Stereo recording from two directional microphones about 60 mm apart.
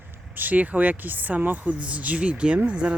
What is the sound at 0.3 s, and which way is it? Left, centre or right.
Speech, right.